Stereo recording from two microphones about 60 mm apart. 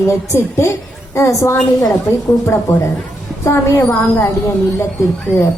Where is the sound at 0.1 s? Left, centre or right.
Left.